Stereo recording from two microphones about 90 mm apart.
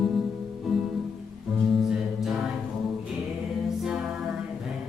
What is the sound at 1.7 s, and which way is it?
Choir, 5° right (ahead or behind).